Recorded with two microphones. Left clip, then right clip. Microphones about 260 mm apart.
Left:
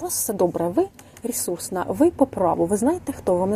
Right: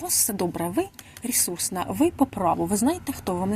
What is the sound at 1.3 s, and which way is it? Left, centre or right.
Speech, right.